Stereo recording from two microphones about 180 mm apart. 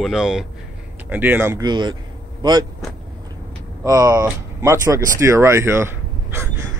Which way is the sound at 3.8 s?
20° right (ahead or behind).